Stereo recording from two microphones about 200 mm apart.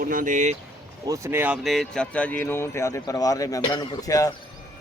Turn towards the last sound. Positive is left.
turn(degrees=15)  # may be behind; listen again after turning